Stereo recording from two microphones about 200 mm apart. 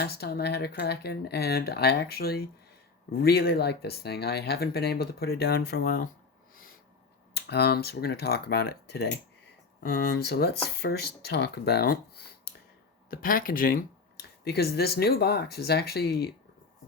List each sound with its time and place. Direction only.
0.0 s speech: 50° left (ahead or behind)
7.3 s speech: 55° left (ahead or behind)